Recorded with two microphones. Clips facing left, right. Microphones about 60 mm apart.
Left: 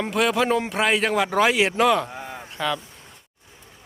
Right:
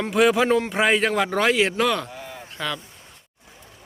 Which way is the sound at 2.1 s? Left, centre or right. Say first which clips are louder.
Left 2 dB; left.